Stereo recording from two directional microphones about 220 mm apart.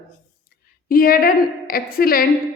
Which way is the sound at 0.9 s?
40° left (ahead or behind).